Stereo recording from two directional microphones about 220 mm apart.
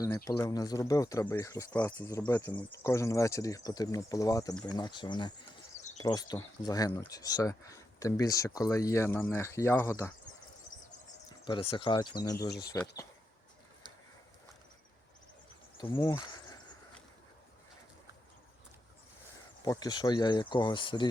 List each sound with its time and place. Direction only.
0.3 s speech: 15° left (ahead or behind)
11.4 s speech: 20° left (ahead or behind)
15.8 s speech: 20° left (ahead or behind)
19.6 s speech: 15° left (ahead or behind)